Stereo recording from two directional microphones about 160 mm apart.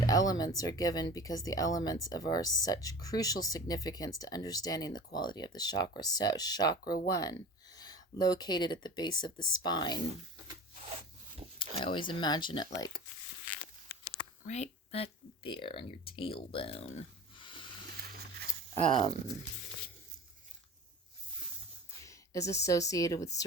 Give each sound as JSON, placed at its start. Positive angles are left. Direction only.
{"t": 0.0, "sound": "speech", "side_deg": 25}
{"t": 11.8, "sound": "speech", "side_deg": 30}
{"t": 14.4, "sound": "speech", "side_deg": 45}
{"t": 17.9, "sound": "a sound", "side_deg": -85}
{"t": 18.7, "sound": "speech", "side_deg": 35}
{"t": 22.0, "sound": "speech", "side_deg": 20}